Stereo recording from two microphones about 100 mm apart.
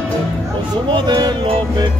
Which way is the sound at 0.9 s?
50° right (ahead or behind).